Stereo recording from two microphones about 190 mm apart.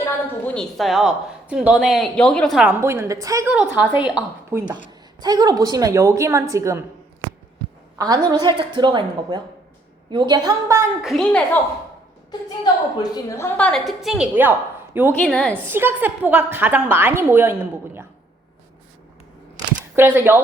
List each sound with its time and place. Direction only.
0.0 s a woman's voice: 5° left (ahead or behind); by 4.6 s 10° right (ahead or behind)
5.2 s a woman's voice: 20° right (ahead or behind)
7.9 s a woman's voice: 20° right (ahead or behind)
11.0 s a woman's voice: 5° left (ahead or behind)
12.3 s a woman's voice: 20° left (ahead or behind); by 14.5 s 5° right (ahead or behind)
15.2 s a woman's voice: 5° left (ahead or behind)
15.6 s a woman's voice: 10° right (ahead or behind)
20.0 s a woman's voice: 10° right (ahead or behind)